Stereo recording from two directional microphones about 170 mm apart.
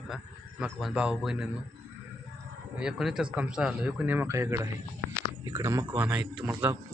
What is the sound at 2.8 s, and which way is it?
A man's voice, 5° right (ahead or behind).